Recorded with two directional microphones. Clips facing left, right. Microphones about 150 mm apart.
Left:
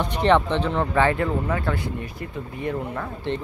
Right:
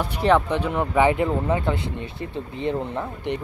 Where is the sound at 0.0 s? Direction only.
5° right (ahead or behind).